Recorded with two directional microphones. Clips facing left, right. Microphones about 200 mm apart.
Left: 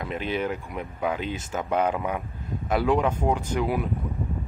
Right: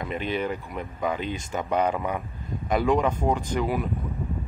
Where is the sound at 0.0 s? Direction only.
5° left (ahead or behind).